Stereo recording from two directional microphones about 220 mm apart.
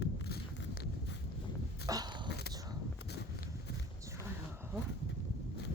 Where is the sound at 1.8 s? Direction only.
15° right (ahead or behind).